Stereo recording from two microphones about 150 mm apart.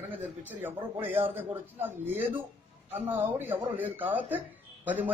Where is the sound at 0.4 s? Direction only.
15° right (ahead or behind).